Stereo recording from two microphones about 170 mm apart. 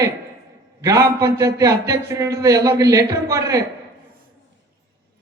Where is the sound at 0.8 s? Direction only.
20° right (ahead or behind).